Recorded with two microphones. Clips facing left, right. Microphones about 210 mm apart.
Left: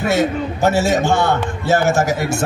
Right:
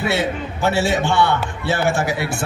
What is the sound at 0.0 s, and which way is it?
A man's voice, 45° left (ahead or behind).